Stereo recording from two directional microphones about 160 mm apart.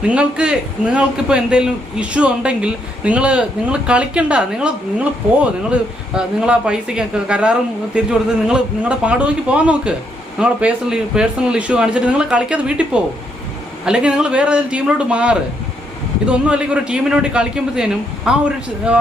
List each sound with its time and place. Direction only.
0.1 s a man's voice: 5° right (ahead or behind)